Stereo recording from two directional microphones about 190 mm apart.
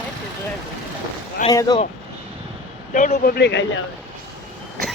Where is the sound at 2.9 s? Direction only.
50° left (ahead or behind); by 3.8 s 65° left (ahead or behind).